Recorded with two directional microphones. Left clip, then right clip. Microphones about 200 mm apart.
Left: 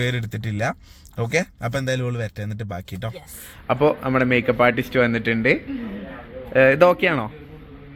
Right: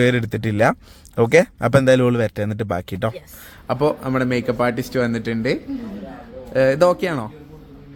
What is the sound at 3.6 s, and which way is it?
Speech, 10° right (ahead or behind).